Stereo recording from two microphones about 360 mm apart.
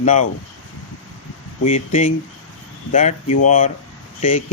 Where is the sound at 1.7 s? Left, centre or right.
Centre.